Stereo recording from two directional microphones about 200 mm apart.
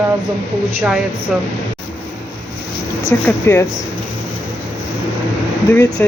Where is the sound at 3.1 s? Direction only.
10° left (ahead or behind).